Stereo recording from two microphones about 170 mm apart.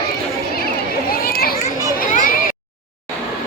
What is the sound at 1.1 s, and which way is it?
Children playing, 60° left (ahead or behind).